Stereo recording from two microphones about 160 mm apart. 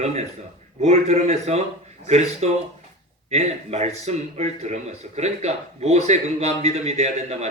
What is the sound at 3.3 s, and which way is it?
Speech, 45° right (ahead or behind).